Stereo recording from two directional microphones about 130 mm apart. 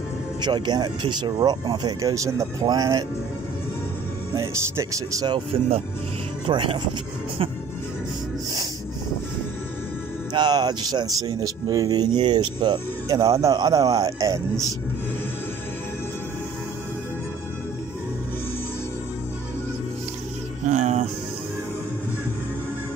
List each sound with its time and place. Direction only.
0.4 s speech: 35° right (ahead or behind)
4.4 s speech: 25° right (ahead or behind)
6.4 s speech: 40° right (ahead or behind)
10.3 s speech: 35° right (ahead or behind)
20.6 s music: 65° right (ahead or behind)